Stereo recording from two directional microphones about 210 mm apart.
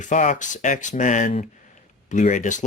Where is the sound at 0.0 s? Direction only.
35° left (ahead or behind).